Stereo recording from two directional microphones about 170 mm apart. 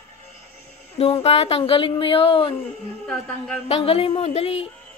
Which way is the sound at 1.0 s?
35° left (ahead or behind).